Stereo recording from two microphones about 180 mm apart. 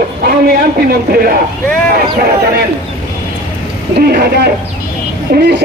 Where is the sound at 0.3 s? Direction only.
60° right (ahead or behind).